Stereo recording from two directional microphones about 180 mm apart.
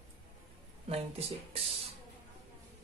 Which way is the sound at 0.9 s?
35° right (ahead or behind).